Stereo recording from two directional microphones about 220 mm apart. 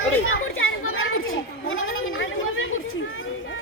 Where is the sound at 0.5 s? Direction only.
65° left (ahead or behind).